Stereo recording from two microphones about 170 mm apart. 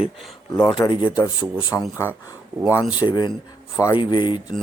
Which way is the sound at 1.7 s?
15° left (ahead or behind).